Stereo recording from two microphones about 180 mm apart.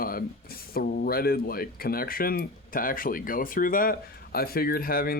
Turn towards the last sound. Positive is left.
turn(degrees=55)  # may be behind; listen again after turning